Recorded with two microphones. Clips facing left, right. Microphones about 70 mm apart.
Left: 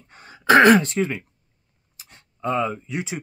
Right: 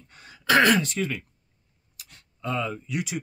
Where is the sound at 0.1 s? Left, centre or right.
Left.